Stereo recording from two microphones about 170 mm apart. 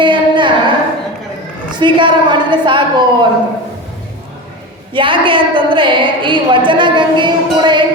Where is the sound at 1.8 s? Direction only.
30° right (ahead or behind).